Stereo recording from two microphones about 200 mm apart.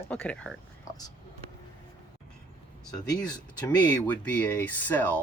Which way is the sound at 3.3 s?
20° left (ahead or behind).